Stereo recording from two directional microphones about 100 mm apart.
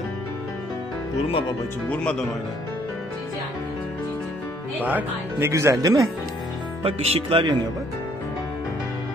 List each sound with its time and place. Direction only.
1.9 s speech: 10° left (ahead or behind)
4.7 s speech: 15° right (ahead or behind)
5.5 s speech: 30° right (ahead or behind)
6.8 s speech: 85° right; by 7.5 s 60° right (ahead or behind)